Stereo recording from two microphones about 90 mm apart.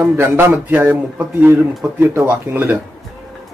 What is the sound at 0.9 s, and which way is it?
Speech, 15° right (ahead or behind).